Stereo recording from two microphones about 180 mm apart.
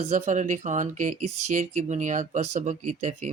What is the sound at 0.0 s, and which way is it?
Speech, 40° right (ahead or behind).